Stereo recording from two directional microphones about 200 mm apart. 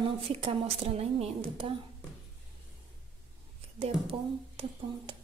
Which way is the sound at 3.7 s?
30° right (ahead or behind).